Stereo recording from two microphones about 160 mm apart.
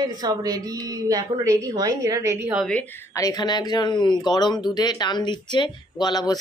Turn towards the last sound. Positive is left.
turn(degrees=25)  # may be behind; listen again after turning